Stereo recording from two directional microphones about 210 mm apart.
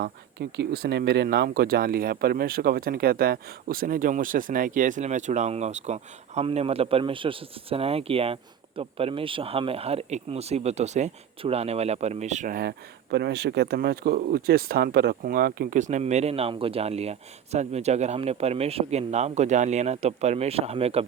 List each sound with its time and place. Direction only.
0.0 s speech: 55° right (ahead or behind); by 21.0 s 30° right (ahead or behind)